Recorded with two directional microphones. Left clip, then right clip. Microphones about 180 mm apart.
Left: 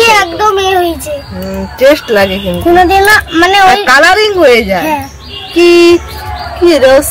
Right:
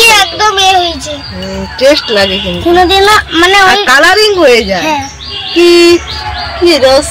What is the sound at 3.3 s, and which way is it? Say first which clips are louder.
Speech: even; 65° left (ahead or behind).